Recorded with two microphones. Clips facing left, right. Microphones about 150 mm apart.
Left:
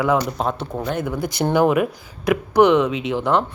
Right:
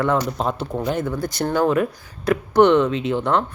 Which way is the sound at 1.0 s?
20° left (ahead or behind).